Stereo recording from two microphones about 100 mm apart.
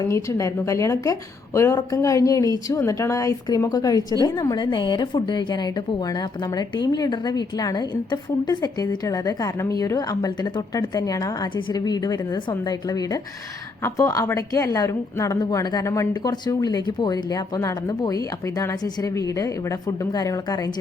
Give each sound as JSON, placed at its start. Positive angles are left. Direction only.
{"t": 0.1, "sound": "a woman's voice", "side_deg": 30}
{"t": 4.5, "sound": "a woman's voice", "side_deg": 50}